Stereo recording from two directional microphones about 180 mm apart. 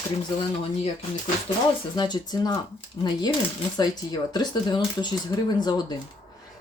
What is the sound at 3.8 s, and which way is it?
Speech, 20° left (ahead or behind).